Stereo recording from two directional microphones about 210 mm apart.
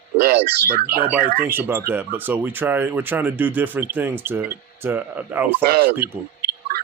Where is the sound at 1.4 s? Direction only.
10° right (ahead or behind).